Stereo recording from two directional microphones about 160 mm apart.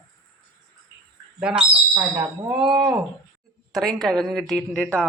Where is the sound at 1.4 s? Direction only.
5° right (ahead or behind).